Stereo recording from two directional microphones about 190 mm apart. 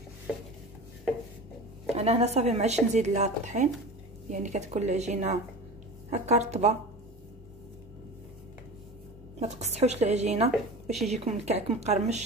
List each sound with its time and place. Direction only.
1.9 s speech: 35° right (ahead or behind)
9.4 s speech: 35° right (ahead or behind)